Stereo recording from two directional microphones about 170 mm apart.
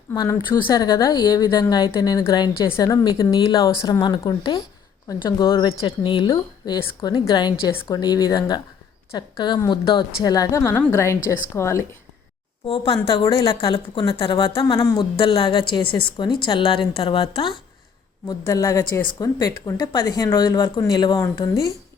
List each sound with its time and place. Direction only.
0.1 s a woman's voice: 20° left (ahead or behind)
12.6 s speech: 30° left (ahead or behind)